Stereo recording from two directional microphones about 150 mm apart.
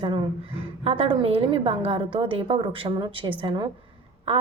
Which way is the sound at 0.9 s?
40° right (ahead or behind).